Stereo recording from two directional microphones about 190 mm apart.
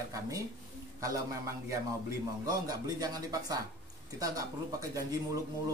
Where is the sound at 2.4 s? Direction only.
20° right (ahead or behind).